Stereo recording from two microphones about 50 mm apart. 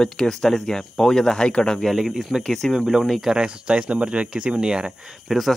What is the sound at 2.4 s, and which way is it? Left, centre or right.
Speech, centre.